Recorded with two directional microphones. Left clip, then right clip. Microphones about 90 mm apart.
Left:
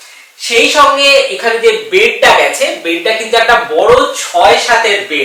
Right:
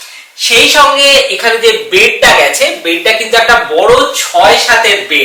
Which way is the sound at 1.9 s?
10° left (ahead or behind).